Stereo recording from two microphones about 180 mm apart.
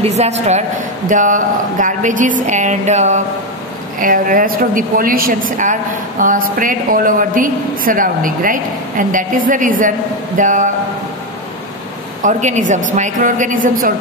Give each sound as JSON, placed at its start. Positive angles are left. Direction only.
{"t": 0.0, "sound": "a woman's voice", "side_deg": -35}
{"t": 12.2, "sound": "a woman's voice", "side_deg": -45}